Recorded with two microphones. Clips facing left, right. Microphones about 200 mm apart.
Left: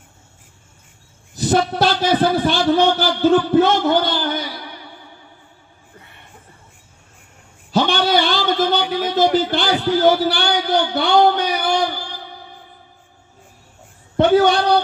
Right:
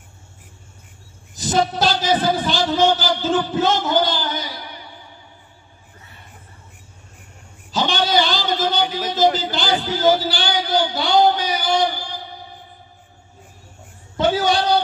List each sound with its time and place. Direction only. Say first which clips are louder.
1.3 s a man's voice: left 2 dB; 60° left (ahead or behind)
7.7 s a sound: left 3 dB; 60° left (ahead or behind)
9.1 s a man's voice: left 3 dB; 60° left (ahead or behind)
14.1 s a man's voice: left 5 dB; 60° left (ahead or behind)